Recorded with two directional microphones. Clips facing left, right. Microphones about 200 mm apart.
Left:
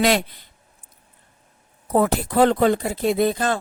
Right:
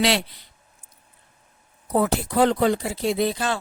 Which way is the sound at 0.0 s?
50° left (ahead or behind).